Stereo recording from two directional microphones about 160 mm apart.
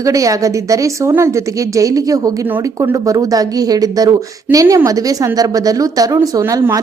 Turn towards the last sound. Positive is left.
turn(degrees=-20)  # may be behind; listen again after turning